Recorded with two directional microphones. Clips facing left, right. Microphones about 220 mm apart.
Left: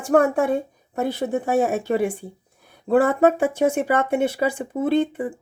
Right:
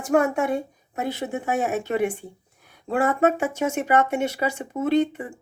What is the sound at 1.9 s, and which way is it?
A woman's voice, 35° left (ahead or behind).